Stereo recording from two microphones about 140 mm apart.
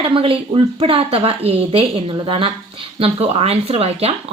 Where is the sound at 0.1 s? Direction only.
40° right (ahead or behind).